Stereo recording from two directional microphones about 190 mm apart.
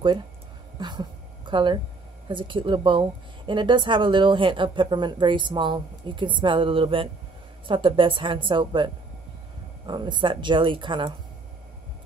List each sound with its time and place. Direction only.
0.7 s speech: 25° right (ahead or behind)